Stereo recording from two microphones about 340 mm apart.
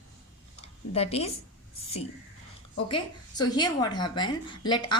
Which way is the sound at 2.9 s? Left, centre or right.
Centre.